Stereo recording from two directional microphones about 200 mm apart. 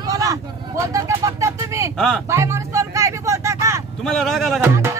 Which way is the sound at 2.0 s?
Centre (ahead or behind).